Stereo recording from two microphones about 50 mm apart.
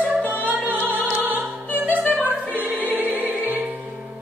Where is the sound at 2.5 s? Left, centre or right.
Right.